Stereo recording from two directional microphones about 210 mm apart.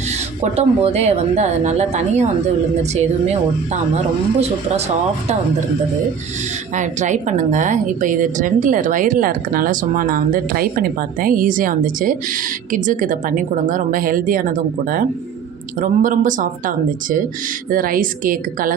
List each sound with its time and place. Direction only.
0.5 s a woman's voice: 30° right (ahead or behind)
6.7 s a woman's voice: 35° right (ahead or behind)